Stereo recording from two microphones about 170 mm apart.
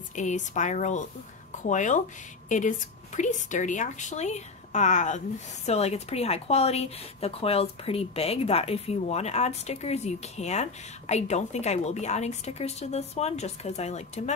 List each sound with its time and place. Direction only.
0.1 s speech: 45° left (ahead or behind)
3.2 s a woman's voice: 45° left (ahead or behind)